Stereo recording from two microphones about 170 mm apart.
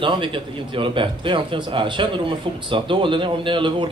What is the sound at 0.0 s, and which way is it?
A man's voice, 30° right (ahead or behind).